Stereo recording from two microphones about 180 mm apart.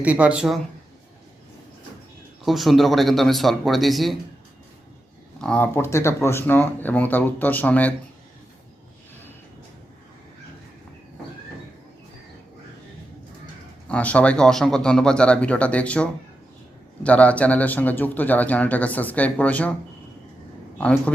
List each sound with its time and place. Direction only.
0.0 s speech: 10° right (ahead or behind)
2.4 s speech: centre (ahead or behind)
5.4 s a man's voice: 5° left (ahead or behind)
13.8 s a man's voice: 5° left (ahead or behind)
20.7 s a man's voice: 5° left (ahead or behind)